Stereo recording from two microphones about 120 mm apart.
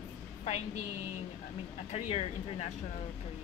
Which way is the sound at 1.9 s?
60° left (ahead or behind).